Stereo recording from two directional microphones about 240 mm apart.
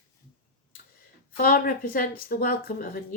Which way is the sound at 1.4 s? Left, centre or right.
Left.